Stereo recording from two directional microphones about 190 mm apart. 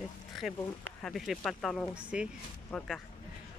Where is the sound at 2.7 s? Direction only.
5° left (ahead or behind).